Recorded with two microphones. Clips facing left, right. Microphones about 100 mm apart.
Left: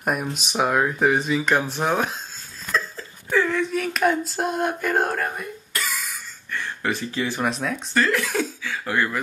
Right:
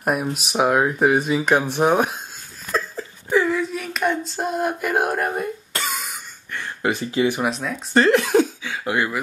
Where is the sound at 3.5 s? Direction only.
Centre (ahead or behind).